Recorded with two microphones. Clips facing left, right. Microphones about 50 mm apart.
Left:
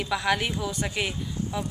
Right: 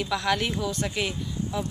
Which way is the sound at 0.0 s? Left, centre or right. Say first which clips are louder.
Even; centre.